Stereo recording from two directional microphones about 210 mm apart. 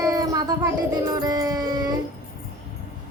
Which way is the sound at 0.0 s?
15° right (ahead or behind).